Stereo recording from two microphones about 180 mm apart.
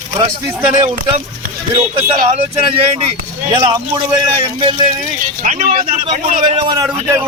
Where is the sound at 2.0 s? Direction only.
30° right (ahead or behind).